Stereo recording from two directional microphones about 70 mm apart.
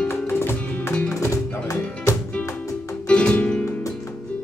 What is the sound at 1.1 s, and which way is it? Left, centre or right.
Music, left.